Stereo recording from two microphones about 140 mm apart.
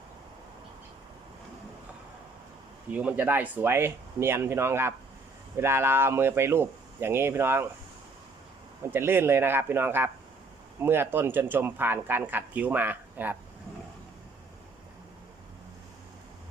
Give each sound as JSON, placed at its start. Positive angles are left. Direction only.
{"t": 2.9, "sound": "speech", "side_deg": -10}
{"t": 8.9, "sound": "speech", "side_deg": -15}